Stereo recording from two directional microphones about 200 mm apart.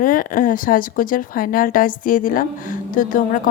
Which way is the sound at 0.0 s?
45° left (ahead or behind).